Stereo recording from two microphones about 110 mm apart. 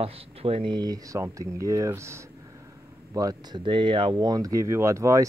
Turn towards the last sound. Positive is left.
turn(degrees=-30)  # may be behind; listen again after turning